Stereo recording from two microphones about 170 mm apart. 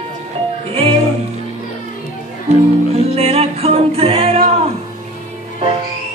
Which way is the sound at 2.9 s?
35° right (ahead or behind).